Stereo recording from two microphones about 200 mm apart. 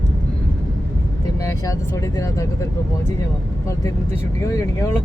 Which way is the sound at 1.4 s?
15° left (ahead or behind).